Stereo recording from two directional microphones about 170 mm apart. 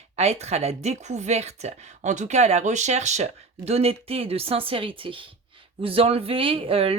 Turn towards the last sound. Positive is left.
turn(degrees=-35)  # may be behind; listen again after turning